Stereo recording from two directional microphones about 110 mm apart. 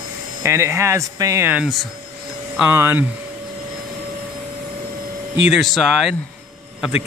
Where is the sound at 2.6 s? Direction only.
20° right (ahead or behind).